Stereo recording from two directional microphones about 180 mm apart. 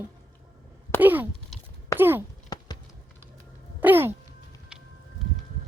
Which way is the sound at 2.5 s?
20° left (ahead or behind).